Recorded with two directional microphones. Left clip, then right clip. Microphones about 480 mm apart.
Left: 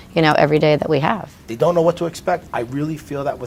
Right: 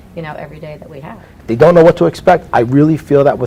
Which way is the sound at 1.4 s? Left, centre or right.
Right.